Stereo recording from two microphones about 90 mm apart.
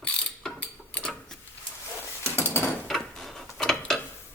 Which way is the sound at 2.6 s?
5° left (ahead or behind).